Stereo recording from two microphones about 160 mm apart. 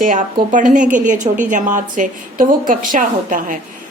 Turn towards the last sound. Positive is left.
turn(degrees=-55)  # may be behind; listen again after turning